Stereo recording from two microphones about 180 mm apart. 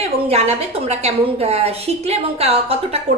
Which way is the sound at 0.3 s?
35° right (ahead or behind).